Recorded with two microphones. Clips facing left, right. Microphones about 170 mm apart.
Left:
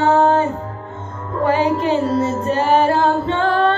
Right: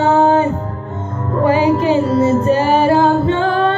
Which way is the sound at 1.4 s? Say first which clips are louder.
Right 3 dB; 5° right (ahead or behind).